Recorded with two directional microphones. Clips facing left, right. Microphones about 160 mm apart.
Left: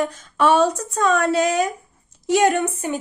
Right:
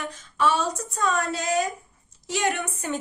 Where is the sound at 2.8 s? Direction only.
15° left (ahead or behind).